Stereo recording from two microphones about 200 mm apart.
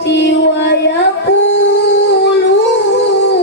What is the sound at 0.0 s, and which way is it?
Music, 60° left (ahead or behind).